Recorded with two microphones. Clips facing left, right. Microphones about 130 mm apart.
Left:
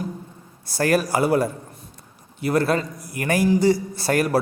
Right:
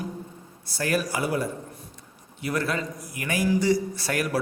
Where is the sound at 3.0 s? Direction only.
60° left (ahead or behind).